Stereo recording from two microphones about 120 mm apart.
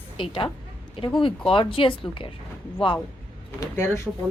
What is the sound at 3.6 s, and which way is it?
Speech, 20° left (ahead or behind).